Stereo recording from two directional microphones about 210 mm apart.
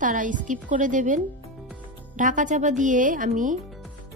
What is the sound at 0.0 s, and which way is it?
Speech, 40° right (ahead or behind).